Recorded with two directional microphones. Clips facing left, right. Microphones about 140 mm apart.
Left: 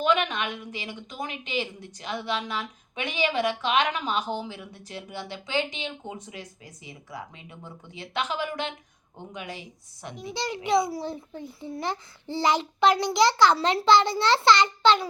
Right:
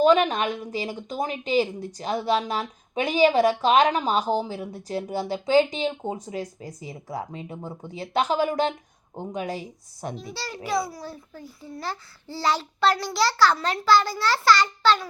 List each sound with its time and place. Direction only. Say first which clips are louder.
0.0 s a woman's voice: right 6 dB; 35° right (ahead or behind)
10.3 s a child's voice: left 4 dB; 20° left (ahead or behind)